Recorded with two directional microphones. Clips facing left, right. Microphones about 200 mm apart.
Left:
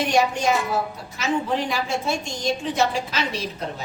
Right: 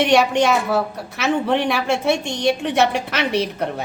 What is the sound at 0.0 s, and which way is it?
A woman's voice, 70° right (ahead or behind).